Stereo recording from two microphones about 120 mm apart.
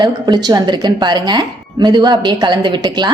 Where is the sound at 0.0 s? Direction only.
35° right (ahead or behind).